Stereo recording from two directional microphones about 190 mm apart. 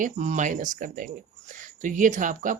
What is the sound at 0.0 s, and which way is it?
Speech, 40° right (ahead or behind).